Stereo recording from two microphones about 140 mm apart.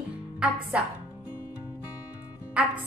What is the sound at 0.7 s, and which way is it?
Music, 10° right (ahead or behind).